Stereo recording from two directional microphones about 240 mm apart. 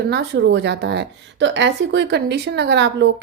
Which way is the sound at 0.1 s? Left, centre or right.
Right.